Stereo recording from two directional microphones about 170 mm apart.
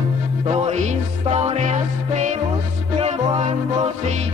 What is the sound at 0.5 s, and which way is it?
Music, 40° right (ahead or behind).